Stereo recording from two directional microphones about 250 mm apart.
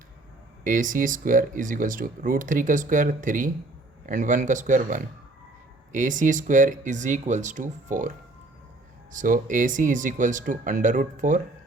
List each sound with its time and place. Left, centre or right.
0.6 s speech: right
9.1 s speech: right